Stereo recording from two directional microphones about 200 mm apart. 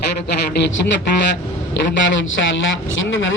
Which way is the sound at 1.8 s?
65° left (ahead or behind).